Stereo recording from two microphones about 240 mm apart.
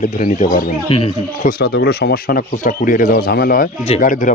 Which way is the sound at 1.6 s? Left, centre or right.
Left.